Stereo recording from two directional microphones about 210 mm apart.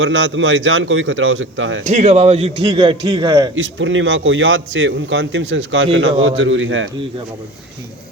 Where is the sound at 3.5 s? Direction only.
65° right (ahead or behind).